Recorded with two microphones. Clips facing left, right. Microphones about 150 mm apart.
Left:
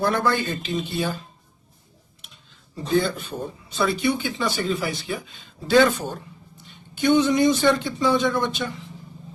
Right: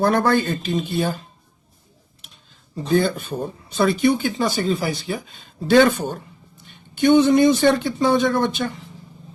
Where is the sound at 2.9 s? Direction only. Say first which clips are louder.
Right 3 dB; 50° right (ahead or behind).